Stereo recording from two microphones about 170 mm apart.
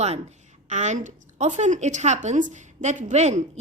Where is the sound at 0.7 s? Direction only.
45° right (ahead or behind).